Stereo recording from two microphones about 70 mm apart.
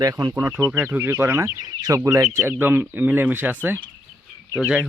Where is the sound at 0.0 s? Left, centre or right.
Right.